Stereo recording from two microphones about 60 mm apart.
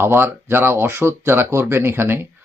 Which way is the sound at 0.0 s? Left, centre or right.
Right.